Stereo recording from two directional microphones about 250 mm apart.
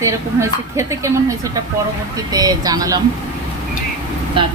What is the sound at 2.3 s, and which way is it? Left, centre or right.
Speech, centre.